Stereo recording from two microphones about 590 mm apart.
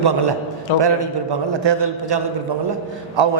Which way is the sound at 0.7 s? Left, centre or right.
Left.